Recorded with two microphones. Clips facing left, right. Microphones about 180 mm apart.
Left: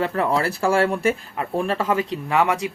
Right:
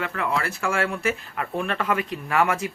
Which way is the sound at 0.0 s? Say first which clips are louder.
Left 5 dB; 35° left (ahead or behind).